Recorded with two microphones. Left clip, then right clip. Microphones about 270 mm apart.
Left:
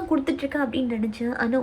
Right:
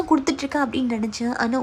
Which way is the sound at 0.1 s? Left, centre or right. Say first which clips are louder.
Right 2 dB; centre.